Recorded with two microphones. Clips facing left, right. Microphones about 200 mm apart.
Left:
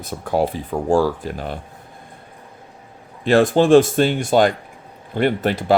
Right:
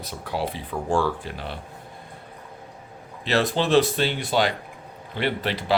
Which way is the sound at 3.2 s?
50° left (ahead or behind).